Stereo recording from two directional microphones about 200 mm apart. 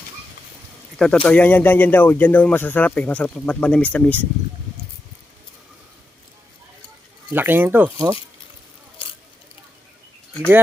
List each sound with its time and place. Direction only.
0.9 s speech: 5° left (ahead or behind)
7.3 s speech: 10° right (ahead or behind)
9.0 s biting: 25° left (ahead or behind)